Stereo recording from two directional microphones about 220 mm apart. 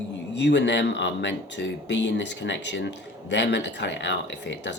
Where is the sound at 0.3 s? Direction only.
55° left (ahead or behind).